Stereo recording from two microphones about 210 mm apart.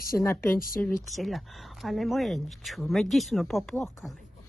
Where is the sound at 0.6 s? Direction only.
40° left (ahead or behind).